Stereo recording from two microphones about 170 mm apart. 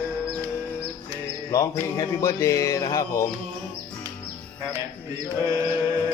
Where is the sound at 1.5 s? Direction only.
20° left (ahead or behind).